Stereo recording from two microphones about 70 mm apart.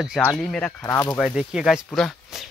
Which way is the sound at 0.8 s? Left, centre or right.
Left.